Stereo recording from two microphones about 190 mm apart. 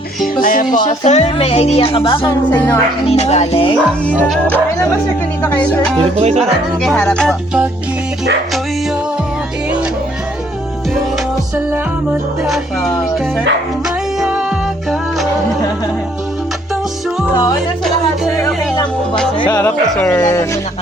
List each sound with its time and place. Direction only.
0.4 s speech: 45° left (ahead or behind); by 2.2 s 30° left (ahead or behind)
2.2 s speech: 15° left (ahead or behind)
3.1 s speech: 35° left (ahead or behind)
4.2 s speech: 10° left (ahead or behind)
6.0 s speech: 35° right (ahead or behind)
6.8 s music: 5° left (ahead or behind)
11.5 s music: 10° right (ahead or behind)
19.4 s speech: 15° left (ahead or behind)